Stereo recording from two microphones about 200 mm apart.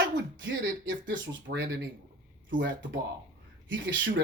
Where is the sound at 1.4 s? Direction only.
60° right (ahead or behind).